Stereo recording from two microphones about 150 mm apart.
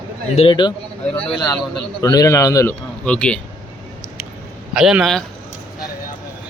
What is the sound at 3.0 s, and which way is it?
Speech, 5° left (ahead or behind).